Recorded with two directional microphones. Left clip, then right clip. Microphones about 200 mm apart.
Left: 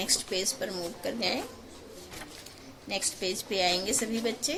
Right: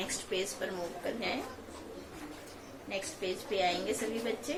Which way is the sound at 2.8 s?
55° left (ahead or behind).